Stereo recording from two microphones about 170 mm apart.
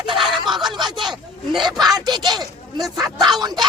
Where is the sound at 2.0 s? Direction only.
25° right (ahead or behind).